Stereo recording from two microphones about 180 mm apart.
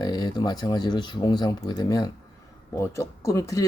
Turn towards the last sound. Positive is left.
turn(degrees=15)  # may be behind; listen again after turning